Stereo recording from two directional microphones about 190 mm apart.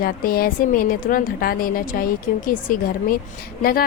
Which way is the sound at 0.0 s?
50° left (ahead or behind).